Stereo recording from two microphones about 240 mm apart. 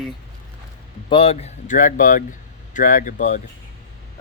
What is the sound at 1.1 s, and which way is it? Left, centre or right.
Speech, left.